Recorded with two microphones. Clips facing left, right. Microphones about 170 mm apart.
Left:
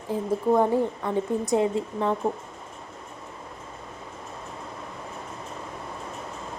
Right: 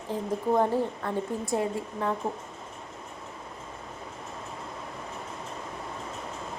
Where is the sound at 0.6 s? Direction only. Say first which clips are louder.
Left 3 dB; 15° left (ahead or behind).